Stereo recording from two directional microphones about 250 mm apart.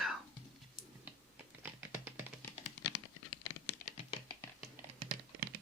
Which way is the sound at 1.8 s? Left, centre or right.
Centre.